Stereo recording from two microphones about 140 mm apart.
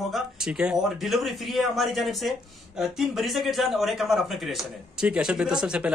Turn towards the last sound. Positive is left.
turn(degrees=-5)  # may be behind; listen again after turning